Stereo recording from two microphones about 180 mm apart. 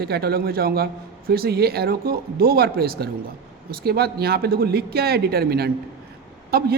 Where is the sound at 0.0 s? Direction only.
60° right (ahead or behind).